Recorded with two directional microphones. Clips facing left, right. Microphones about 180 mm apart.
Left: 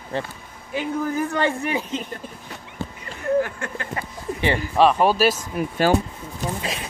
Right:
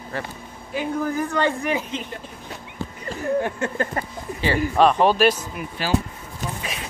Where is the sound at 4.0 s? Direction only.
45° right (ahead or behind).